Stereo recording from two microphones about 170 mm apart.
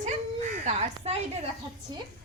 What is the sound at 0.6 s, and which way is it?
Speech, 40° right (ahead or behind).